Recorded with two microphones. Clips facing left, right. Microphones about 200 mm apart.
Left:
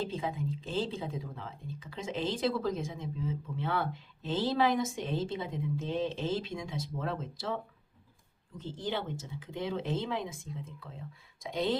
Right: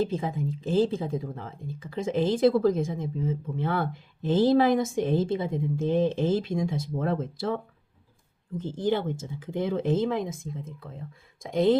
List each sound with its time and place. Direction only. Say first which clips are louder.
0.0 s speech: right 7 dB; 50° right (ahead or behind)